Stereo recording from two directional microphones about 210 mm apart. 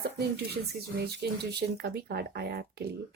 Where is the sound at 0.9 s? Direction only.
50° right (ahead or behind).